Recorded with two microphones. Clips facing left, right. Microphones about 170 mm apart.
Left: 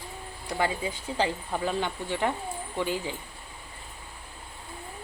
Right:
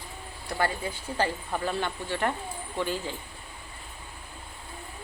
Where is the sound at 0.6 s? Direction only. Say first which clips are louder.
Even; 15° left (ahead or behind).